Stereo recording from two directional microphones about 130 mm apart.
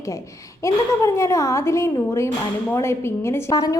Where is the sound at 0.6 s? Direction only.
25° left (ahead or behind).